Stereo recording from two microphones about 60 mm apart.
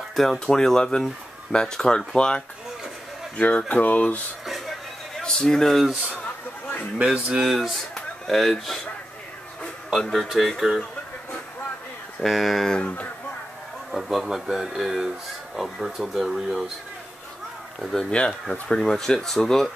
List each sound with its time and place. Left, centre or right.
0.1 s speech: centre; by 4.2 s left
4.5 s a sound: centre
7.0 s speech: centre
9.9 s speech: centre
12.2 s speech: centre
12.7 s speech: left
13.9 s speech: centre
17.9 s speech: centre